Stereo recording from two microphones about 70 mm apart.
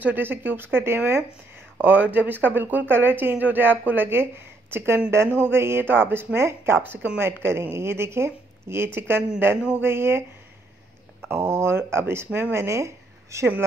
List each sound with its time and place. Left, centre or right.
0.0 s a woman's voice: right
11.2 s a woman's voice: right